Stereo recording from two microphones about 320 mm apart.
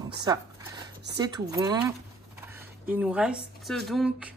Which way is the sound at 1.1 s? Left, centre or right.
Centre.